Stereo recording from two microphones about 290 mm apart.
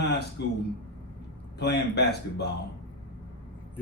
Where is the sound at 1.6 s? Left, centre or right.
Left.